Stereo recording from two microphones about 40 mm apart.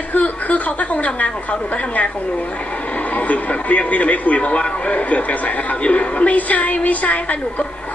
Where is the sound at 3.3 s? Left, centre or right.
Left.